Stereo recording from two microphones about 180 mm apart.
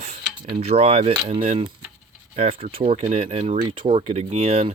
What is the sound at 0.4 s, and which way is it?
Coin, 35° right (ahead or behind).